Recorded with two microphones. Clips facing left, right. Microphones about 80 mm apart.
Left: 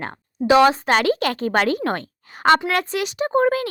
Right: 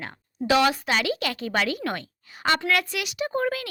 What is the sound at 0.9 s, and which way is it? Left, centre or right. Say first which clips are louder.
A woman's voice: left 7 dB; left.